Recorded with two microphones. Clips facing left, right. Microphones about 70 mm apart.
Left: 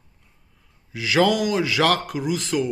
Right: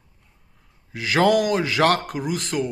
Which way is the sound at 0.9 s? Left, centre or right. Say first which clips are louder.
Right 1 dB; right.